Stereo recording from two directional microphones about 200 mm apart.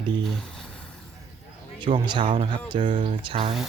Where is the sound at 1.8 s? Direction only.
25° right (ahead or behind).